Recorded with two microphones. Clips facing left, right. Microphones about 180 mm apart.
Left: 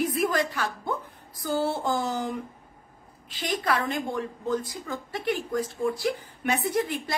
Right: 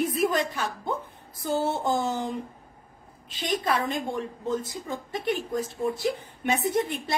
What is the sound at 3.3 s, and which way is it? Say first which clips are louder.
A woman's voice: even; 25° right (ahead or behind).